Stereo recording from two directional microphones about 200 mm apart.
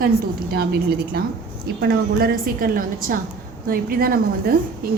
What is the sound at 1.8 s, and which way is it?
A woman's voice, 50° right (ahead or behind).